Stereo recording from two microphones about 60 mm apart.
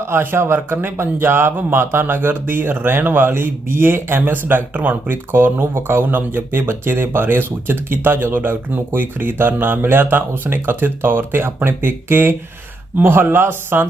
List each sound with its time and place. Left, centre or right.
0.0 s speech: right